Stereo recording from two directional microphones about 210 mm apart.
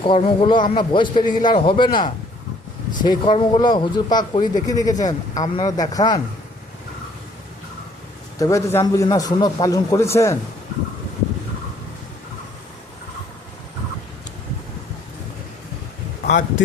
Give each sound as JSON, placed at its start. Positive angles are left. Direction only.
{"t": 0.0, "sound": "speech", "side_deg": 25}
{"t": 8.4, "sound": "a man's voice", "side_deg": 15}